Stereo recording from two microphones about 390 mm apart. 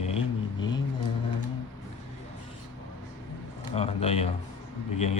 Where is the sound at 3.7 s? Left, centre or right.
Centre.